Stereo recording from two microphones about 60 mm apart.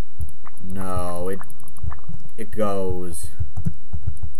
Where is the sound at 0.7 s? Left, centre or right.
Centre.